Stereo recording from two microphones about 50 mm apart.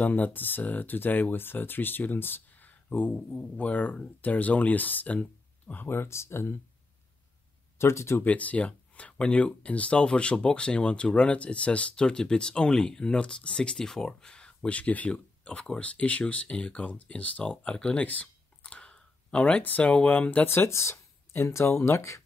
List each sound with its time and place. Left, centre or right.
0.0 s speech: left
7.8 s speech: left
8.2 s speech: left
17.5 s a sound: left
19.8 s speech: left
20.4 s speech: left